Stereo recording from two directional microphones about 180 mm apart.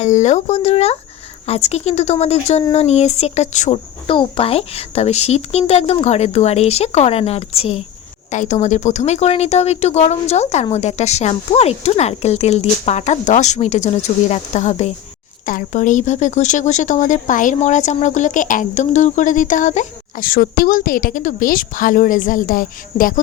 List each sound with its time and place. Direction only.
0.0 s a woman's voice: 40° left (ahead or behind)